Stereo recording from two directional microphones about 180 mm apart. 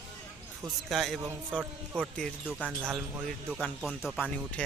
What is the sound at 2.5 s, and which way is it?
Speech, 5° right (ahead or behind).